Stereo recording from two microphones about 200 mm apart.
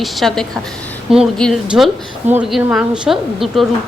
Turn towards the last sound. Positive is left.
turn(degrees=0)  # may be behind; listen again after turning